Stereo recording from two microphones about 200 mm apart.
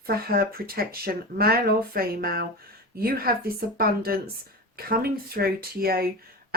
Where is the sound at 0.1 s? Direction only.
50° right (ahead or behind).